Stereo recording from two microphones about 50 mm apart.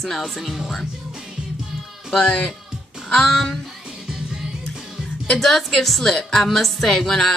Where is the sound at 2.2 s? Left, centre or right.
Centre.